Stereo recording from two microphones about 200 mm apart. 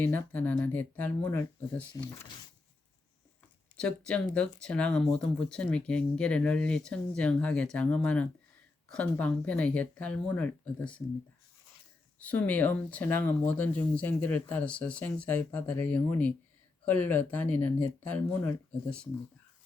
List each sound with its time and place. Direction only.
0.0 s speech: 10° left (ahead or behind)
3.8 s speech: 5° left (ahead or behind)
12.2 s speech: 5° left (ahead or behind)